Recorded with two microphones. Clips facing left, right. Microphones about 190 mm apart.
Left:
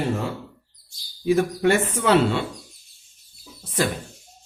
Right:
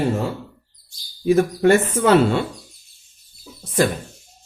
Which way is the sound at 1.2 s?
45° right (ahead or behind).